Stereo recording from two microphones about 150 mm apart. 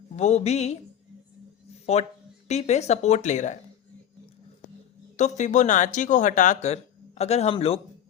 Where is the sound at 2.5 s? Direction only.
50° left (ahead or behind).